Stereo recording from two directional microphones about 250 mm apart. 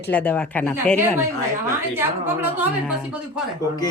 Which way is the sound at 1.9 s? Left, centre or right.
Centre.